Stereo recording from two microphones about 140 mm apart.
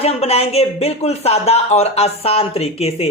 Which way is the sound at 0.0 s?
45° left (ahead or behind).